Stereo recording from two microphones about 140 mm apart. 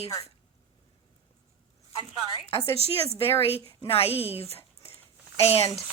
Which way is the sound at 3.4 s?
40° left (ahead or behind).